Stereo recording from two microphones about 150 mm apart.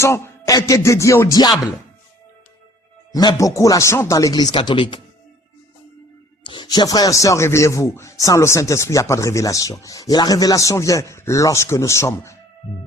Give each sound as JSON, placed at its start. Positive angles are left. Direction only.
{"t": 0.0, "sound": "speech", "side_deg": 20}
{"t": 3.1, "sound": "speech", "side_deg": 25}
{"t": 6.4, "sound": "speech", "side_deg": 30}